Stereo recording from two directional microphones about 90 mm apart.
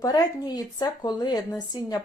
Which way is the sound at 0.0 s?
45° left (ahead or behind).